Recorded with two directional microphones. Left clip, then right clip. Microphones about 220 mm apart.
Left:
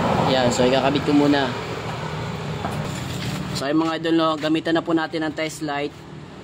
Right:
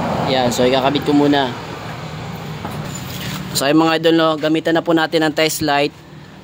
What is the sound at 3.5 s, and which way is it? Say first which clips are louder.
A man's voice: right 8 dB; 50° right (ahead or behind).